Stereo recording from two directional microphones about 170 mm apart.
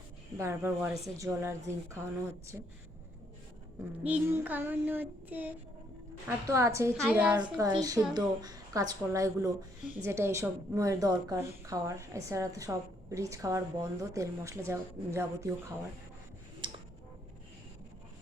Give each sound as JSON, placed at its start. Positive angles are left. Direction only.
{"t": 0.3, "sound": "a woman's voice", "side_deg": -15}
{"t": 4.0, "sound": "a woman's voice", "side_deg": -10}
{"t": 6.9, "sound": "a woman's voice", "side_deg": -5}
{"t": 7.5, "sound": "a woman's voice", "side_deg": -20}
{"t": 16.6, "sound": "a sound", "side_deg": -30}